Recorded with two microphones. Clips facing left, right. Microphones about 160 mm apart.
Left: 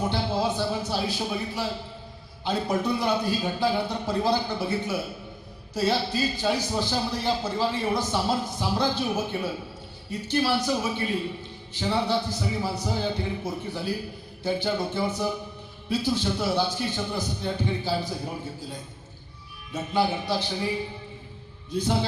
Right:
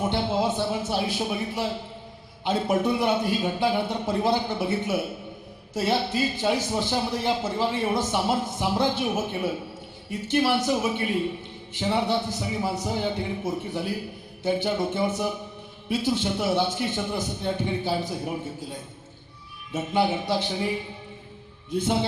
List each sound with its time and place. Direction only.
0.0 s a man's voice: 20° right (ahead or behind)